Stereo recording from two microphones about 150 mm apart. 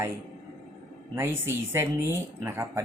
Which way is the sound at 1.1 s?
15° right (ahead or behind).